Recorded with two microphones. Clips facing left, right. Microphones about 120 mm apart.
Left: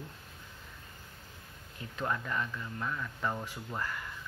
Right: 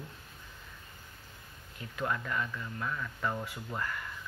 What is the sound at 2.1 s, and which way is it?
Speech, 20° left (ahead or behind).